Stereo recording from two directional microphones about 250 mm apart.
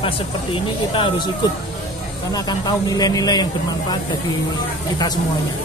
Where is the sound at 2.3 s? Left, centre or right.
Centre.